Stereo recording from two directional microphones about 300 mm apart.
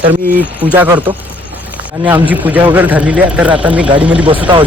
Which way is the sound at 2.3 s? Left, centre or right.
Centre.